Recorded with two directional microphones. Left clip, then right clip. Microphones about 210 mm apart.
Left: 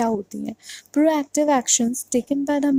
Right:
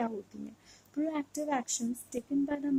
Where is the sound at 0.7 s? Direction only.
35° left (ahead or behind).